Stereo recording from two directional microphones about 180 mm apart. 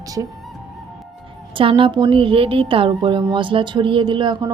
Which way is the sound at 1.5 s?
30° right (ahead or behind).